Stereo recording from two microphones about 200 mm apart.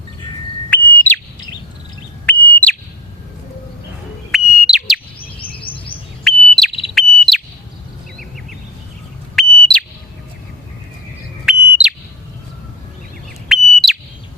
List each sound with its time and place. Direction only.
0.7 s bird: 10° left (ahead or behind)
2.2 s bird: 5° left (ahead or behind)
4.3 s bird: 5° right (ahead or behind)
5.4 s chirp: 25° left (ahead or behind)
6.2 s bird: centre (ahead or behind)
9.3 s bird: centre (ahead or behind)
11.4 s bird: 5° right (ahead or behind)
13.5 s bird: centre (ahead or behind)